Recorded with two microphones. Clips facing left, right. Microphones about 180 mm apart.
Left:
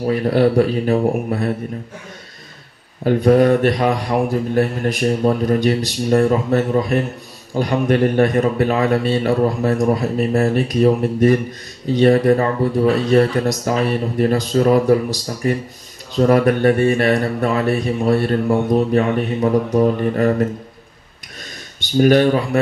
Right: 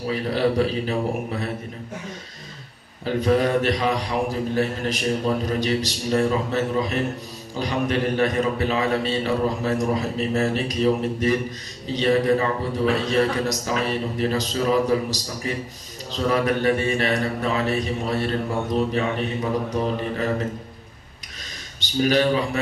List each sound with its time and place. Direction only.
0.0 s mantra: 50° left (ahead or behind)
3.0 s mantra: 50° left (ahead or behind)
21.7 s mantra: 50° left (ahead or behind)